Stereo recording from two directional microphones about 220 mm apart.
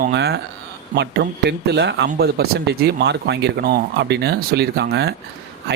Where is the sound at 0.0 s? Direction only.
50° right (ahead or behind).